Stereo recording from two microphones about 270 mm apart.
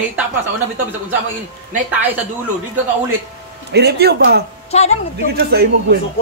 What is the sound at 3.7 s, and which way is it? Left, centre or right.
Speech, right.